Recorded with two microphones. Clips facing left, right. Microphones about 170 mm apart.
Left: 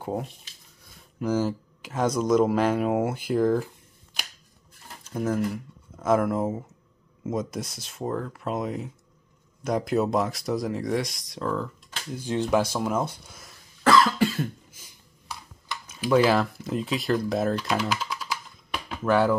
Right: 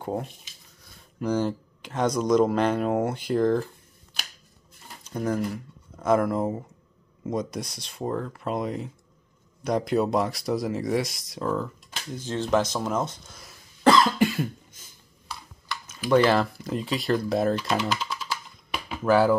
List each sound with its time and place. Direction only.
0.0 s speech: centre (ahead or behind)
5.1 s speech: 5° left (ahead or behind)
12.1 s speech: 15° left (ahead or behind)
13.8 s cough: 20° right (ahead or behind)
16.1 s speech: 5° left (ahead or behind)
18.7 s a sound: 5° right (ahead or behind)